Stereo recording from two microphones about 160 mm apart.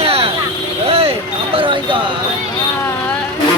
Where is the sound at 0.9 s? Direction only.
35° right (ahead or behind).